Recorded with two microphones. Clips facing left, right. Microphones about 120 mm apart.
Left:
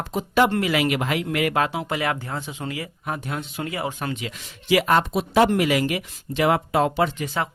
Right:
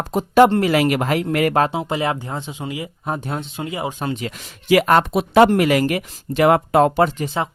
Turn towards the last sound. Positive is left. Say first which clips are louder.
# right 6 dB
turn(degrees=-45)  # may be behind; listen again after turning